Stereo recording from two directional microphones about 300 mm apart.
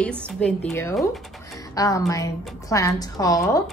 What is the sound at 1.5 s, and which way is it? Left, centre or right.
Music, centre.